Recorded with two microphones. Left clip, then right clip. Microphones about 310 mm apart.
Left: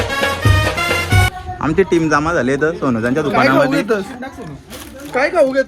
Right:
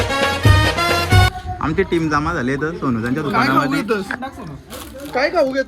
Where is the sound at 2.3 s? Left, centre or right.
Centre.